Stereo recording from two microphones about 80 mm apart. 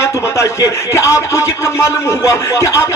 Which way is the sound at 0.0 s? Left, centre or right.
Left.